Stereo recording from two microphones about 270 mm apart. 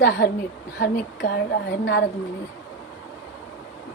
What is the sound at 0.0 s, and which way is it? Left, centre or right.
Speech, left.